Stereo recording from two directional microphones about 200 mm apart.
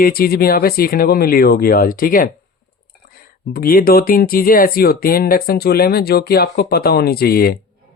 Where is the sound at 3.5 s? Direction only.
45° left (ahead or behind).